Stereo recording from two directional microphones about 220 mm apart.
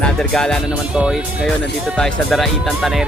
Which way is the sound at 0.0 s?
5° left (ahead or behind).